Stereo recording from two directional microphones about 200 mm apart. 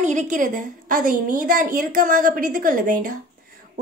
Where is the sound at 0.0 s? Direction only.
35° right (ahead or behind).